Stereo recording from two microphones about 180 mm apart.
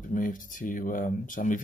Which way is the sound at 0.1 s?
45° left (ahead or behind).